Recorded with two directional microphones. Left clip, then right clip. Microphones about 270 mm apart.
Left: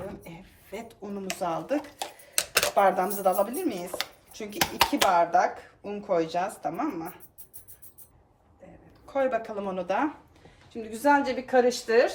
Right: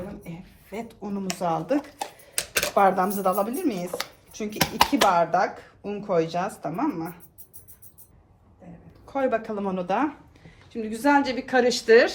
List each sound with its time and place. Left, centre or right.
0.4 s speech: centre
9.0 s speech: centre